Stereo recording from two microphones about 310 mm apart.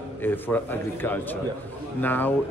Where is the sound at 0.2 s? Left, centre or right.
Centre.